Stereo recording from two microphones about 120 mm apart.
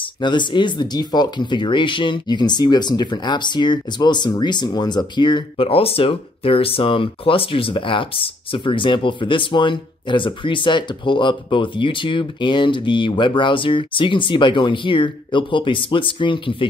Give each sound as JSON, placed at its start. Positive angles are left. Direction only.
{"t": 0.0, "sound": "speech", "side_deg": 40}